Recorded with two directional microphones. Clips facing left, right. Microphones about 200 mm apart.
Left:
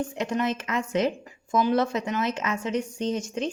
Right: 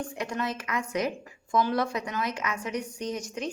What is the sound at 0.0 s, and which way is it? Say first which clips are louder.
A woman's voice: left 5 dB; 20° left (ahead or behind).